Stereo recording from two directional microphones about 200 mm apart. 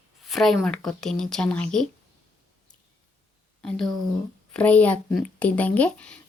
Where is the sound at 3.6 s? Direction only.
5° left (ahead or behind).